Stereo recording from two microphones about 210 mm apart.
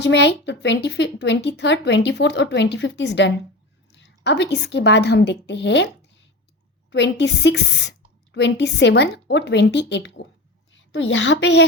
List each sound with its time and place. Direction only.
0.0 s a woman's voice: 55° left (ahead or behind)